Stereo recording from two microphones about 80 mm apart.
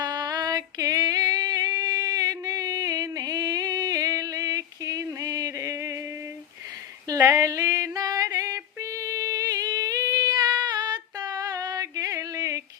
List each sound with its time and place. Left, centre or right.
0.0 s female singing: right
7.1 s female singing: right